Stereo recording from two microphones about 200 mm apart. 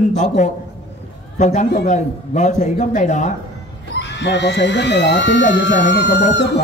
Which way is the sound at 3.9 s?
60° left (ahead or behind).